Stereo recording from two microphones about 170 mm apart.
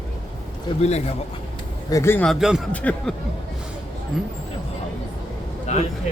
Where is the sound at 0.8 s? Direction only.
40° left (ahead or behind).